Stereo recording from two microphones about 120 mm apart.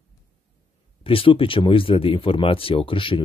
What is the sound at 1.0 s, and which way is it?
Speech, 50° left (ahead or behind).